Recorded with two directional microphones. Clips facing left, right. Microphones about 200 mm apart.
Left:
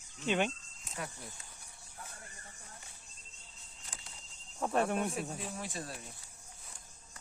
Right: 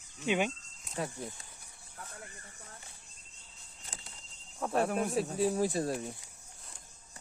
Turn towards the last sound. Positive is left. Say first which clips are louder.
# right 12 dB
turn(degrees=-40)  # may be behind; listen again after turning